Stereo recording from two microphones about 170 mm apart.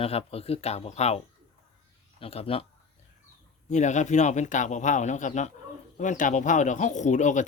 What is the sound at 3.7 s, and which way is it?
A man's voice, 45° left (ahead or behind).